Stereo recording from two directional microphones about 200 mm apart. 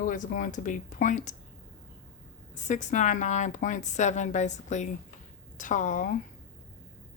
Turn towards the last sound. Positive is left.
turn(degrees=40)  # may be behind; listen again after turning